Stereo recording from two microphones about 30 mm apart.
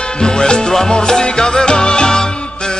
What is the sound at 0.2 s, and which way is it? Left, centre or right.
Music, left.